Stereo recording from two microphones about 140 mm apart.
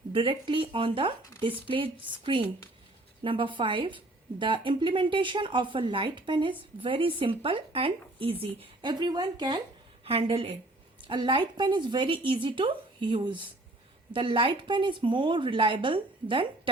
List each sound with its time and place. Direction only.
0.1 s speech: 35° right (ahead or behind)
10.0 s a woman's voice: 45° right (ahead or behind)